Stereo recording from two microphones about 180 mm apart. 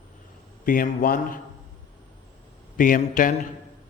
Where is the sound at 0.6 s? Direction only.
50° left (ahead or behind).